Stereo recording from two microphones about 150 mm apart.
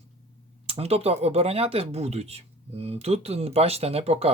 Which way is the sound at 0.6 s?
40° right (ahead or behind).